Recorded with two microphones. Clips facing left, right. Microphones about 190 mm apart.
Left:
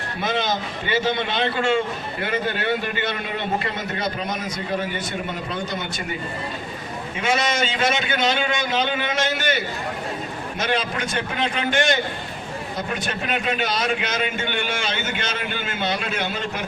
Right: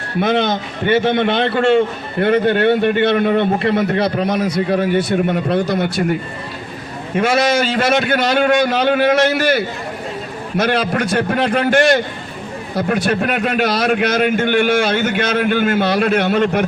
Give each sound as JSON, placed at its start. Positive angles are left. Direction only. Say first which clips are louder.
{"t": 0.2, "sound": "a man's voice", "louder": "right 8 dB", "side_deg": -60}
{"t": 7.2, "sound": "a man's voice", "louder": "right 8 dB", "side_deg": -60}
{"t": 10.6, "sound": "a man's voice", "louder": "right 8 dB", "side_deg": -60}
{"t": 13.1, "sound": "a man's voice", "louder": "right 8 dB", "side_deg": -55}